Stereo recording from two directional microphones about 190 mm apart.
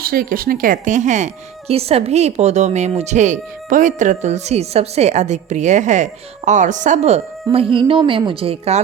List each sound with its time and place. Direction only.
0.0 s a woman's voice: 50° right (ahead or behind); by 8.8 s 30° right (ahead or behind)